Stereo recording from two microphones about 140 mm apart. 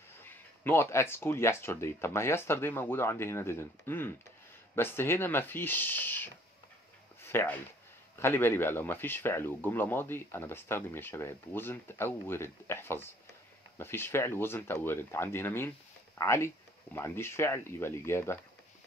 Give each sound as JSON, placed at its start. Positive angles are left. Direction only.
{"t": 0.2, "sound": "speech", "side_deg": 15}